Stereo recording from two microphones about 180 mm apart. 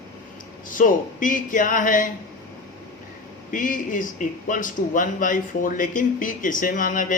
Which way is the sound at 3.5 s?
50° left (ahead or behind).